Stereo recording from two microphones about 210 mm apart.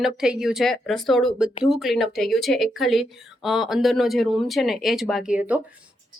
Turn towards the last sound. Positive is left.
turn(degrees=-5)  # may be behind; listen again after turning